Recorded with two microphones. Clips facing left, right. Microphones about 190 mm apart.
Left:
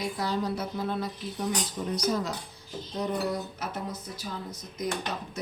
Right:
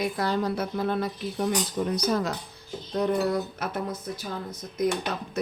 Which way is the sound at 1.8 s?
80° right.